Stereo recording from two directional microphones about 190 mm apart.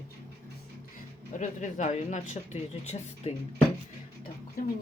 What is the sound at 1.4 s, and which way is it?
Speech, 40° left (ahead or behind).